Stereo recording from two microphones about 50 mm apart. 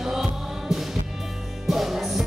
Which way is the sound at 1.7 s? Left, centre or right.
Centre.